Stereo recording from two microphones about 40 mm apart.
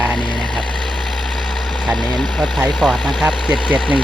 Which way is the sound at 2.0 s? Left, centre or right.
Centre.